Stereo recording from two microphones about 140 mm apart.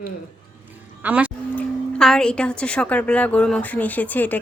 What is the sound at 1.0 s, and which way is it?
Speech, 10° right (ahead or behind).